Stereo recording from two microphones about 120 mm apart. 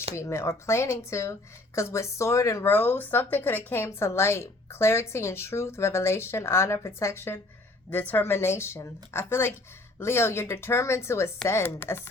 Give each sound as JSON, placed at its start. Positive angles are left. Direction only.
{"t": 0.2, "sound": "a woman's voice", "side_deg": 25}